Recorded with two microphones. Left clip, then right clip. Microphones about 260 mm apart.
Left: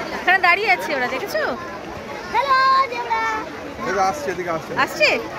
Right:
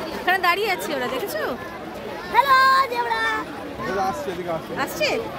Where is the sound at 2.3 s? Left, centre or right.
Right.